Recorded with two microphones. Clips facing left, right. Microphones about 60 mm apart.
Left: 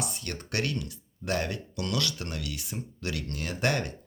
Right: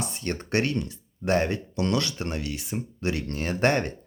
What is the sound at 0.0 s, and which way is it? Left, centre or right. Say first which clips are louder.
Speech: right 5 dB; right.